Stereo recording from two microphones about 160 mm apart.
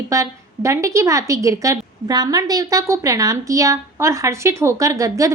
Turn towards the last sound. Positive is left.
turn(degrees=-20)  # may be behind; listen again after turning